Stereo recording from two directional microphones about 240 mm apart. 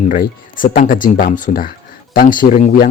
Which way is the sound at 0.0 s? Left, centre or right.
Left.